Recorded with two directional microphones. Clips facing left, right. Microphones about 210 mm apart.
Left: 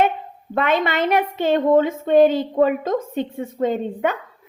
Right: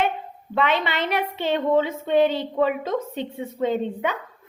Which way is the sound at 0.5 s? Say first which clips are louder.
Left 3 dB; 45° left (ahead or behind).